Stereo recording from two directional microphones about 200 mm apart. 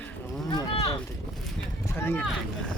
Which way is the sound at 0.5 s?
30° left (ahead or behind).